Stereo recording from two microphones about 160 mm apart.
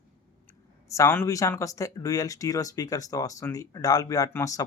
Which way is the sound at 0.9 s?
20° left (ahead or behind).